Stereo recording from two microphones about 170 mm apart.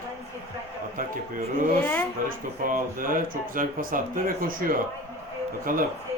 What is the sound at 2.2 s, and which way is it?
Speech, 55° right (ahead or behind).